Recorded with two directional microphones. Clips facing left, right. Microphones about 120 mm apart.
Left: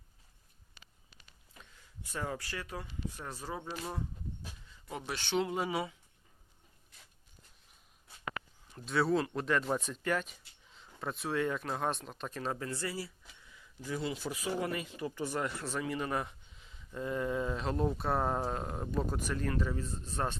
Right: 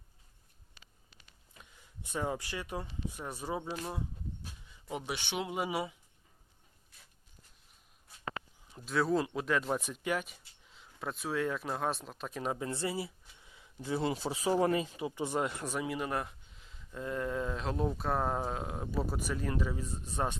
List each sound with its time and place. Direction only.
1.7 s speech: 20° right (ahead or behind)
8.2 s a sound: 30° right (ahead or behind)
8.7 s speech: centre (ahead or behind); by 13.1 s 25° right (ahead or behind)
13.4 s a sound: 25° right (ahead or behind)
14.2 s speech: 30° right (ahead or behind)
14.9 s speech: 20° right (ahead or behind)